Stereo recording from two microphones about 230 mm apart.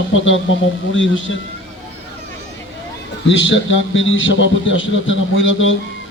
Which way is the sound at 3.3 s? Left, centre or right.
Left.